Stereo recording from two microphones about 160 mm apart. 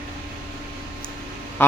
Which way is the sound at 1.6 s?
15° left (ahead or behind).